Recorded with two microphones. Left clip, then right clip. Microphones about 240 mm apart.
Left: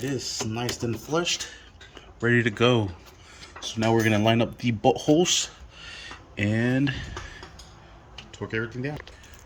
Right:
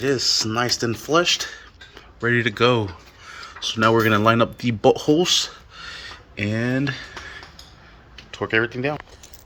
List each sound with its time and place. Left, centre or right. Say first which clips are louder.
0.0 s speech: right 10 dB; centre